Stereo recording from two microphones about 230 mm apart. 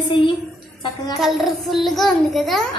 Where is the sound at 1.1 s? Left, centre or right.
Centre.